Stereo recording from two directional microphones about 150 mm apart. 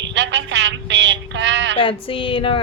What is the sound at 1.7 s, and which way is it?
Speech, 35° left (ahead or behind).